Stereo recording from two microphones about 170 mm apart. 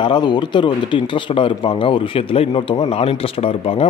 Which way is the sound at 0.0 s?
25° left (ahead or behind).